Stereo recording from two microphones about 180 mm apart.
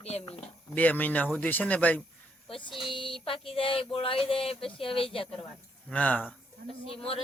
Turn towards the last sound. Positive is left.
turn(degrees=30)  # may be behind; listen again after turning